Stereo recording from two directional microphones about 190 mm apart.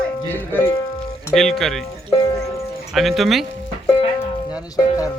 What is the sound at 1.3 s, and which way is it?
Speech, centre (ahead or behind).